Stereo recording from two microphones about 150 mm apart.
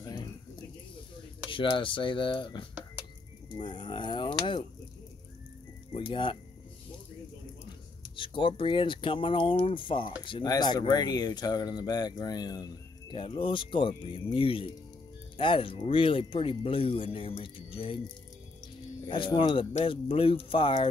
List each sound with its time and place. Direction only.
0.0 s bird: 30° left (ahead or behind)
1.5 s speech: 35° left (ahead or behind)
5.9 s speech: 35° left (ahead or behind)
8.2 s speech: 35° left (ahead or behind)
19.0 s speech: 35° left (ahead or behind)